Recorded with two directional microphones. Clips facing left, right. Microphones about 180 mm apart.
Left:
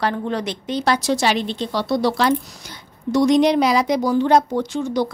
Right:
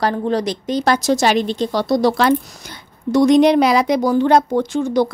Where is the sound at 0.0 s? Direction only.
35° right (ahead or behind).